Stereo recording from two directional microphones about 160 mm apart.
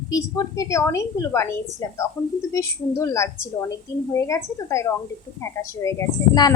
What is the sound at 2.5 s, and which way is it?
A woman's voice, 20° left (ahead or behind).